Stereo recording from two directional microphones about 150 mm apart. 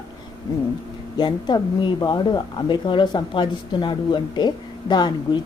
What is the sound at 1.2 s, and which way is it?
A woman's voice, 30° left (ahead or behind).